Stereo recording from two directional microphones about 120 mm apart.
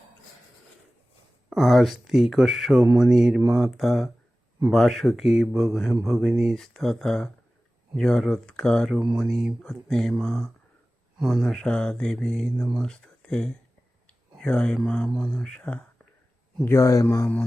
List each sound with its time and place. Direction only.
1.5 s speech: centre (ahead or behind)
16.6 s speech: 25° left (ahead or behind)